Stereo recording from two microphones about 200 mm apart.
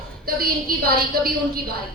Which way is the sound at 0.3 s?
50° right (ahead or behind).